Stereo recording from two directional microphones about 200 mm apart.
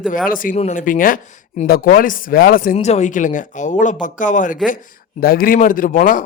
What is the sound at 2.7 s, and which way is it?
Speech, 35° left (ahead or behind).